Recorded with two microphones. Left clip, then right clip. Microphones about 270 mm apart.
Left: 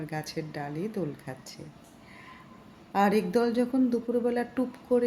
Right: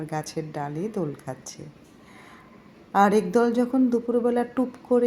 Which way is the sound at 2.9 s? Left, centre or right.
Centre.